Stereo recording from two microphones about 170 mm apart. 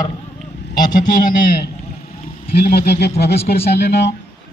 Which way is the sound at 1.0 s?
55° left (ahead or behind).